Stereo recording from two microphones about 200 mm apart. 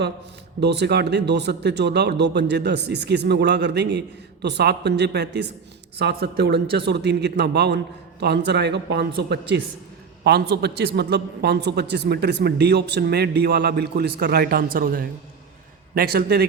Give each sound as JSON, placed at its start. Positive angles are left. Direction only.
{"t": 0.6, "sound": "a man's voice", "side_deg": -55}